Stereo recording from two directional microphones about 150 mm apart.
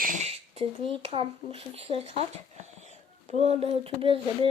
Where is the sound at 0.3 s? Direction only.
40° right (ahead or behind).